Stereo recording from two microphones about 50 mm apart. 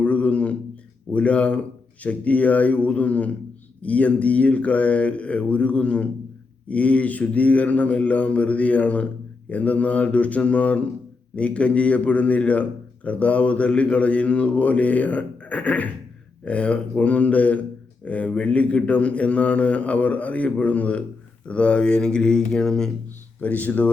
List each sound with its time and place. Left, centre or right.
0.0 s a sound: left
1.1 s speech: left
23.4 s speech: left